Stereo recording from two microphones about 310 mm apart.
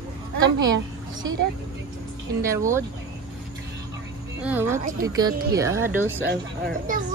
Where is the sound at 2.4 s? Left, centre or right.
Centre.